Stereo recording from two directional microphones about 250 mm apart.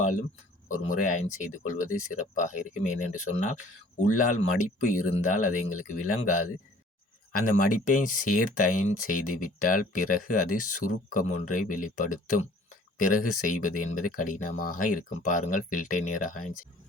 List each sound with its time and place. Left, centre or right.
0.0 s speech: left